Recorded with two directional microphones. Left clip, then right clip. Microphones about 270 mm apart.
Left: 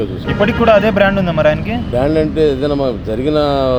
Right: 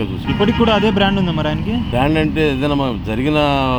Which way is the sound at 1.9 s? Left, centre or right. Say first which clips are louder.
Left 3 dB; right.